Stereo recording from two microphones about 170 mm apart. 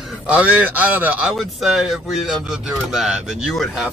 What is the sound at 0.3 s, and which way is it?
Speech, 10° right (ahead or behind).